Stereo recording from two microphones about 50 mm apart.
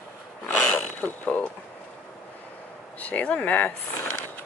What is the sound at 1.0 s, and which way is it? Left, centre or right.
Speech, left.